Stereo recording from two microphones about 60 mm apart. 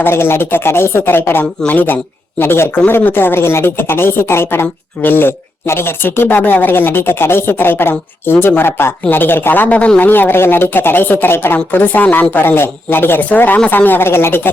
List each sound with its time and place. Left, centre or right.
0.0 s speech: left
2.4 s speech: left